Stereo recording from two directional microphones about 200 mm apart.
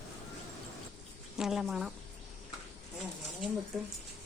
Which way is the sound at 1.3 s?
Centre (ahead or behind).